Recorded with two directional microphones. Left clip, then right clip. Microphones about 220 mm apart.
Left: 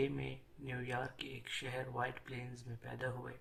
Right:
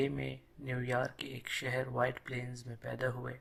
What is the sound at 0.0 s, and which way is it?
Speech, 30° right (ahead or behind).